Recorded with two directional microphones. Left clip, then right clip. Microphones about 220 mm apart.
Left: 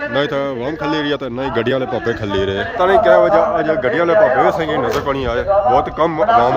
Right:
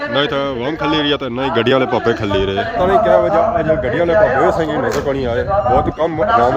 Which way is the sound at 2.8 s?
20° left (ahead or behind).